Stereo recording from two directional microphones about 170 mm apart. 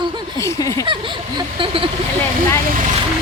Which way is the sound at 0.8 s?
30° right (ahead or behind).